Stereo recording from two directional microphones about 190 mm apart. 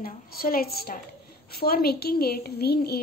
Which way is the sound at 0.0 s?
50° left (ahead or behind).